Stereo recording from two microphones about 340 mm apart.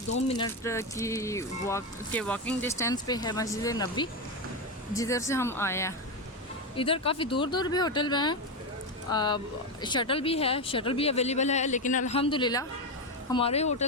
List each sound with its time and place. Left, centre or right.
0.3 s speech: centre